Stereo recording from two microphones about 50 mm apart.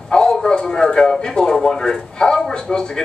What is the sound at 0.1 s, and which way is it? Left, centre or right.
Speech, centre.